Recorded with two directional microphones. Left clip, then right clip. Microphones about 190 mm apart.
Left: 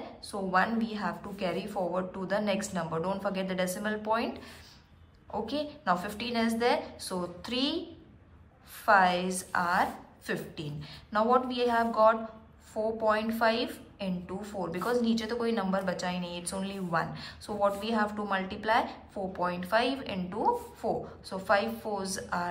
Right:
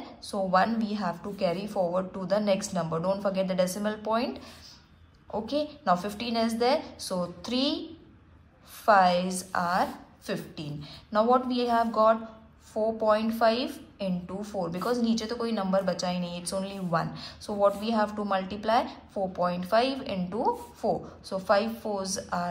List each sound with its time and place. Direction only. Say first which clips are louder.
0.2 s a woman's voice: right 4 dB; 30° right (ahead or behind)
8.8 s a woman's voice: right 3 dB; 30° right (ahead or behind)